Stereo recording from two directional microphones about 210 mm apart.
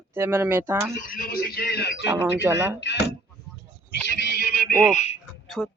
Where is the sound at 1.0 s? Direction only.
40° left (ahead or behind).